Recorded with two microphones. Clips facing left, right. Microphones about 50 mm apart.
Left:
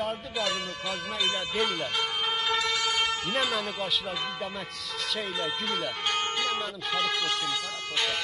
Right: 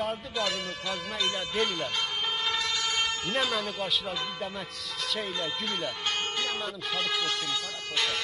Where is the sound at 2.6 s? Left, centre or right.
Centre.